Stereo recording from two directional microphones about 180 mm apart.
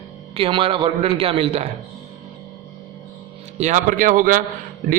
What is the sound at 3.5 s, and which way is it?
Speech, 40° right (ahead or behind).